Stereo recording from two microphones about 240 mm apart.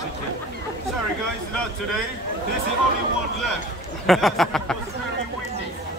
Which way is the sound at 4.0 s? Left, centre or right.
Centre.